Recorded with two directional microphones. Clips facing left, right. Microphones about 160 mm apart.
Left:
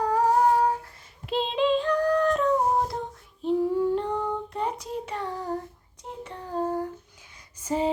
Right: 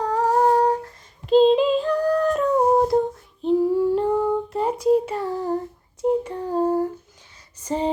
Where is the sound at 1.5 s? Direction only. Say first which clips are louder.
Right 3 dB; 5° right (ahead or behind).